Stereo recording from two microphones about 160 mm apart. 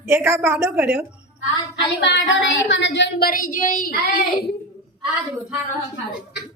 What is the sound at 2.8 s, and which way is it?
Speech, 90° left.